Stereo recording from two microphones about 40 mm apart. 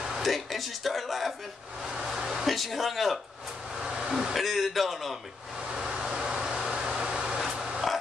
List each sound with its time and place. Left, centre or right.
0.2 s a man's voice: centre
1.9 s speech: centre
3.8 s vehicle: right
4.3 s a man's voice: centre
5.7 s vehicle: right
7.4 s a sound: centre